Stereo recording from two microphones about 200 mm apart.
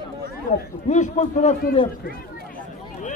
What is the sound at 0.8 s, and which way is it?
Speech, 35° left (ahead or behind).